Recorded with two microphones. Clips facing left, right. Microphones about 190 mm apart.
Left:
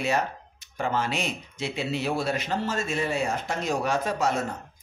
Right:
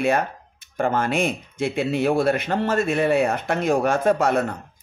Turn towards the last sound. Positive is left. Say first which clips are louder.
# right 7 dB
turn(degrees=-60)  # may be behind; listen again after turning